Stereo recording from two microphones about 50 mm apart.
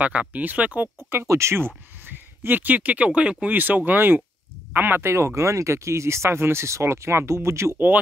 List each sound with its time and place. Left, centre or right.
0.0 s speech: right
1.2 s speech: right
2.0 s speech: right
3.5 s speech: right
5.0 s speech: right